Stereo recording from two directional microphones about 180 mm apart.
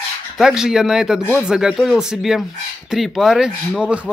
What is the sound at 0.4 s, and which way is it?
Speech, 5° right (ahead or behind).